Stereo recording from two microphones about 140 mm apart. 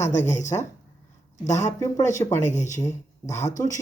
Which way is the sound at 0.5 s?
30° left (ahead or behind).